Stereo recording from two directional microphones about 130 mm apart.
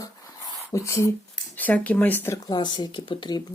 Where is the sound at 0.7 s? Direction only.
20° left (ahead or behind).